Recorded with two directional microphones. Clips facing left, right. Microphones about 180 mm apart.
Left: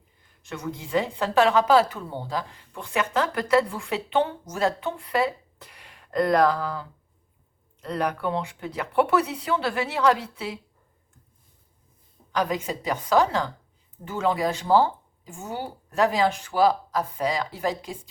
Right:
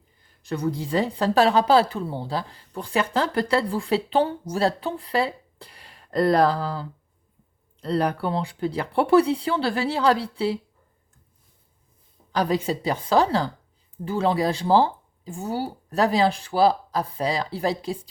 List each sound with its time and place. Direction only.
0.2 s a woman's voice: 35° right (ahead or behind)
12.3 s a woman's voice: 35° right (ahead or behind)